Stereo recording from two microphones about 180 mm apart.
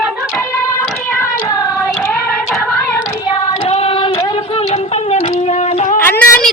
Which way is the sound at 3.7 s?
35° left (ahead or behind).